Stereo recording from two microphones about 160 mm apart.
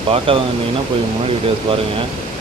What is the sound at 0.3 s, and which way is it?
Speech, 35° right (ahead or behind).